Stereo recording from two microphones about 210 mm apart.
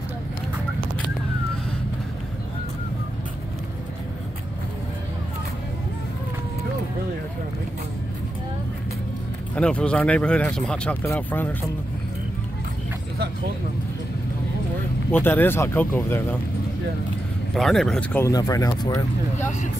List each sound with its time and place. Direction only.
9.6 s speech: 5° left (ahead or behind)
15.0 s speech: 10° left (ahead or behind)
17.6 s speech: centre (ahead or behind)
18.2 s speech: 15° left (ahead or behind)